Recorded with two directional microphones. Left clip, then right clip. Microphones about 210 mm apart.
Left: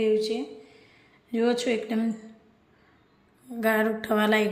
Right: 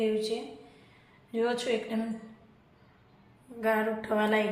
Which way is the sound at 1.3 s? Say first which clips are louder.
Left 4 dB; 55° left (ahead or behind).